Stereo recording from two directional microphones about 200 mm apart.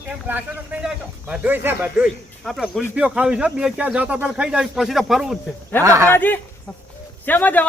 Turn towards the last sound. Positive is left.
turn(degrees=10)  # may be behind; listen again after turning